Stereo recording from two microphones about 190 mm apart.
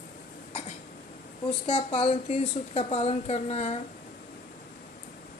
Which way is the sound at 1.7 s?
30° left (ahead or behind).